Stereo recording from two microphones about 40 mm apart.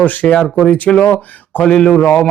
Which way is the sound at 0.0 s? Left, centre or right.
Left.